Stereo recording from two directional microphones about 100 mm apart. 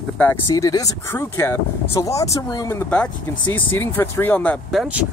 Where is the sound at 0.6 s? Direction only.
35° left (ahead or behind).